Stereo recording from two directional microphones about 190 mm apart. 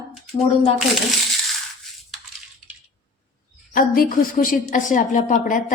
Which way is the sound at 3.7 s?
50° left (ahead or behind).